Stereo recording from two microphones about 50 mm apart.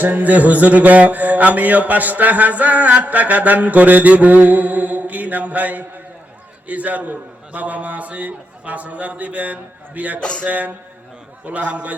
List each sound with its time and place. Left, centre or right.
0.0 s mantra: right
10.2 s a sound: left
10.4 s mantra: right
11.4 s a man's voice: right